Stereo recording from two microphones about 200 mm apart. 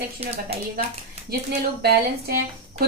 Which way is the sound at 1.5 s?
50° right (ahead or behind).